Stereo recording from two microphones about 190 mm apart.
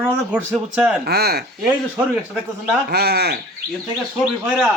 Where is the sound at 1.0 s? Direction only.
55° right (ahead or behind).